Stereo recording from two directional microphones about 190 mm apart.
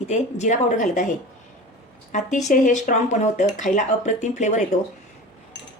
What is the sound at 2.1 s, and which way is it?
Speech, 40° left (ahead or behind).